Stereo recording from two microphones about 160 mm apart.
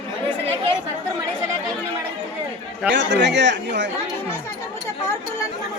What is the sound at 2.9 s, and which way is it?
Speech, 90° right.